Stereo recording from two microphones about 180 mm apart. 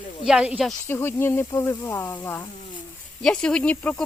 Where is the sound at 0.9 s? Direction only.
15° left (ahead or behind).